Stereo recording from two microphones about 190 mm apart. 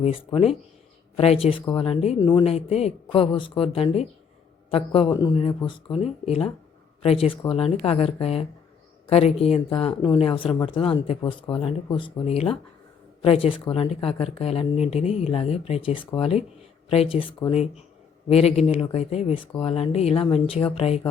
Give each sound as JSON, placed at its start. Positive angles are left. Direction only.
{"t": 1.1, "sound": "a woman's voice", "side_deg": 30}
{"t": 2.1, "sound": "speech", "side_deg": 15}
{"t": 2.4, "sound": "a woman's voice", "side_deg": 35}